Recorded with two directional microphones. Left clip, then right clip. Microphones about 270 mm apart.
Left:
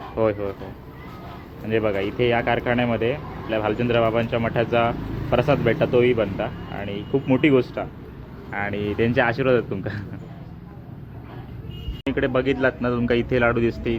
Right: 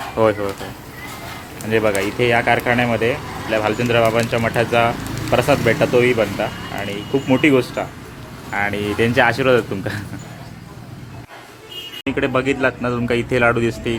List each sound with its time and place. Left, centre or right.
0.2 s speech: centre
1.7 s speech: centre
12.0 s speech: centre